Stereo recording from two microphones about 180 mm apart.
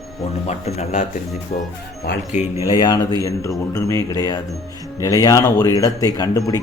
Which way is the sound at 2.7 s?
25° left (ahead or behind).